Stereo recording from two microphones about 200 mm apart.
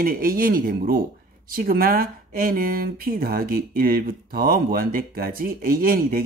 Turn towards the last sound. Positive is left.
turn(degrees=-45)  # may be behind; listen again after turning